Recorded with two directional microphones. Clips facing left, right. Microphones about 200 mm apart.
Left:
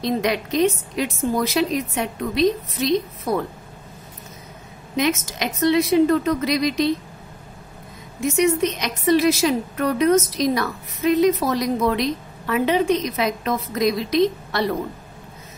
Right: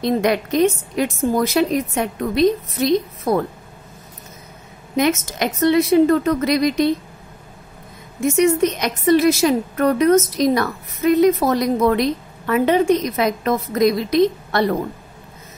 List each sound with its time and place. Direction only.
0.0 s a woman's voice: 50° right (ahead or behind)
4.9 s a woman's voice: 50° right (ahead or behind)
8.2 s a woman's voice: 50° right (ahead or behind)